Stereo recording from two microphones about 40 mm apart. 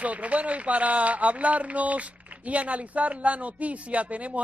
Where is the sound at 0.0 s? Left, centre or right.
Right.